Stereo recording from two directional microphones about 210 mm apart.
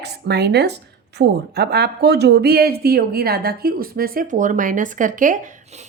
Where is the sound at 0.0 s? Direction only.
50° right (ahead or behind).